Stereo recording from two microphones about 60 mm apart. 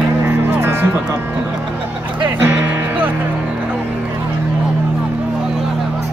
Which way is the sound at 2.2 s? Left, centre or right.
Right.